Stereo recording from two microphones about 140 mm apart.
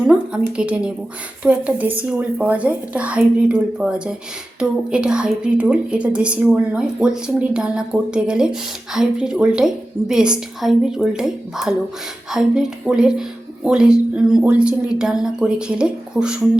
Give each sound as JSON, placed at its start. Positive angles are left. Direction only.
{"t": 0.1, "sound": "a woman's voice", "side_deg": -10}